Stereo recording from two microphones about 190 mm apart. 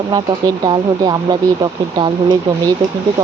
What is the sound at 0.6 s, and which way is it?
Speech, 25° right (ahead or behind).